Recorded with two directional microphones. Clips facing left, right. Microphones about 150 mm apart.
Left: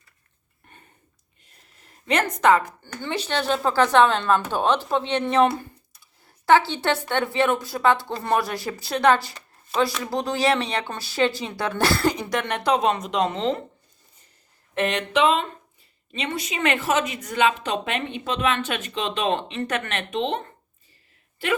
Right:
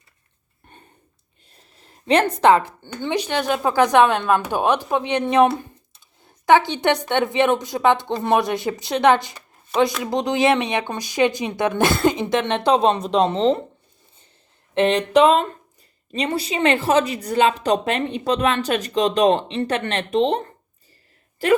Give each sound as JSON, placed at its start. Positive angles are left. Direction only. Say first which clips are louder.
{"t": 1.5, "sound": "speech", "louder": "right 4 dB", "side_deg": -30}
{"t": 14.8, "sound": "a woman's voice", "louder": "right 6 dB", "side_deg": -30}